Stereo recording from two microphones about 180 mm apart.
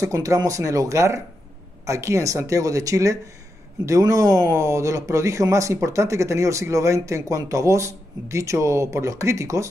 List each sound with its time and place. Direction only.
0.0 s speech: 15° right (ahead or behind)